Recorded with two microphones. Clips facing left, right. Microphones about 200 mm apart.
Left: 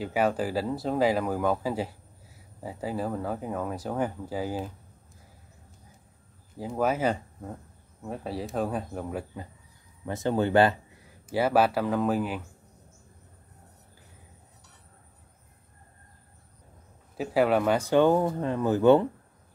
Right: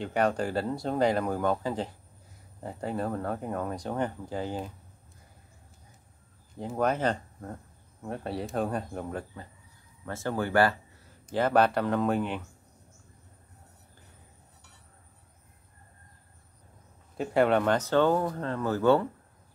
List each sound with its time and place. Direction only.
0.0 s speech: 5° left (ahead or behind)
6.5 s speech: 5° left (ahead or behind); by 11.1 s 20° left (ahead or behind)
11.2 s speech: 5° left (ahead or behind)
17.2 s speech: 5° left (ahead or behind)